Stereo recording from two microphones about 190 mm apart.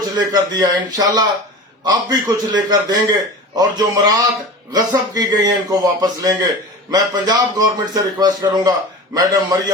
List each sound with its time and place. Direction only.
0.3 s a man's voice: 20° right (ahead or behind)